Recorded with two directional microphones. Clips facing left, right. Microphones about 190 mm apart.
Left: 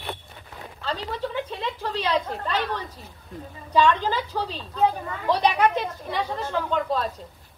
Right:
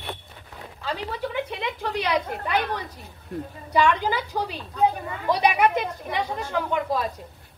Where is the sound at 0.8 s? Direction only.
10° right (ahead or behind).